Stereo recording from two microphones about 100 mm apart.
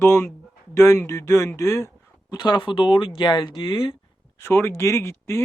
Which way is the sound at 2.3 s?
45° left (ahead or behind).